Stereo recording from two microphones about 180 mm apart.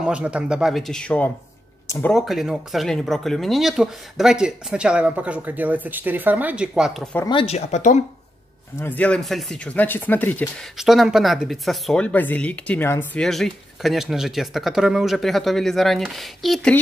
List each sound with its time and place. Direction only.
0.0 s speech: 5° right (ahead or behind); by 2.1 s 15° left (ahead or behind)
2.1 s speech: centre (ahead or behind)
7.2 s speech: 30° left (ahead or behind)
8.7 s speech: 10° left (ahead or behind)
10.8 s speech: centre (ahead or behind)